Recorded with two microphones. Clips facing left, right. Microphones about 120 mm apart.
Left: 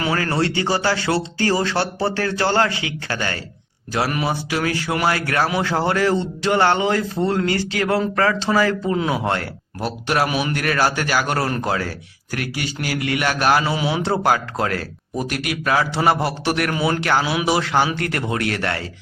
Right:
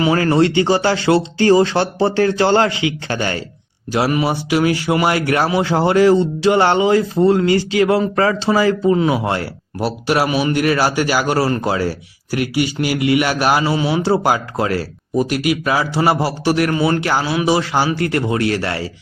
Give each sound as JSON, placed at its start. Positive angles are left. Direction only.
{"t": 0.6, "sound": "speech", "side_deg": -20}
{"t": 10.6, "sound": "a man's voice", "side_deg": -10}